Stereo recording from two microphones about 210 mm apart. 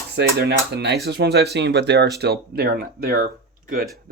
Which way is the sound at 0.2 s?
50° right (ahead or behind).